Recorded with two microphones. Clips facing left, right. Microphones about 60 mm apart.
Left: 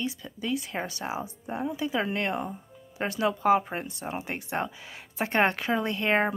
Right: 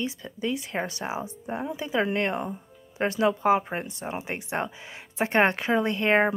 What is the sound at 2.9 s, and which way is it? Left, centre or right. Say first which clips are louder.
Speech: right 4 dB; right.